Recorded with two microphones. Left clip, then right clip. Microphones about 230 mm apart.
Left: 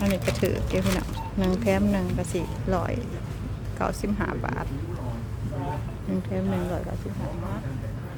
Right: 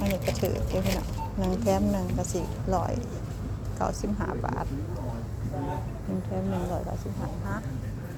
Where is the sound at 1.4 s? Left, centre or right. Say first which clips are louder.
Left 2 dB; centre.